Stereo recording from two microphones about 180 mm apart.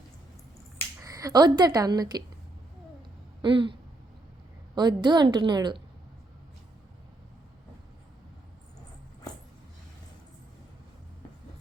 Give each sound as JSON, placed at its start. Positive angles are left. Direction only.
{"t": 1.0, "sound": "a woman's voice", "side_deg": -20}
{"t": 3.4, "sound": "a woman's voice", "side_deg": -30}